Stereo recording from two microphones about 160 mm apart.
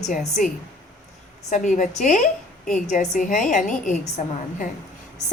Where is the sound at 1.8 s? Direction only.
50° left (ahead or behind).